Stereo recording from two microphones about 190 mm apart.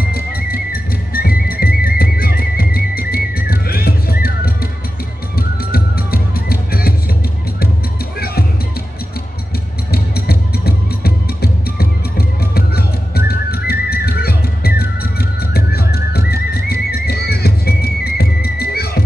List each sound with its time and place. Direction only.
0.1 s music: 50° left (ahead or behind)
5.7 s music: 50° left (ahead or behind)
9.8 s music: 55° left (ahead or behind)